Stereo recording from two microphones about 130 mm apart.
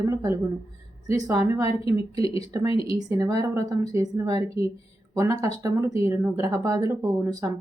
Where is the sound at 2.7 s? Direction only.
45° left (ahead or behind).